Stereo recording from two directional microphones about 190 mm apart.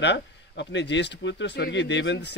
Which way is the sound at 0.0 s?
70° left (ahead or behind).